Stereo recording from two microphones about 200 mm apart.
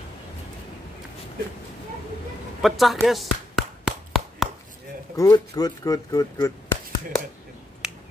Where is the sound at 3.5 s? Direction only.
Centre (ahead or behind).